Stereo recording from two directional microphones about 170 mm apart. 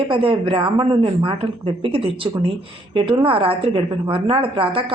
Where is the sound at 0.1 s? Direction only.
30° right (ahead or behind).